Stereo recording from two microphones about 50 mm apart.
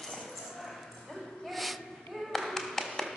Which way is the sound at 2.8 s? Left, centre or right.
Centre.